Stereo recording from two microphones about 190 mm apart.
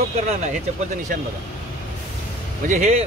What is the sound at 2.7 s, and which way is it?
Speech, 35° right (ahead or behind).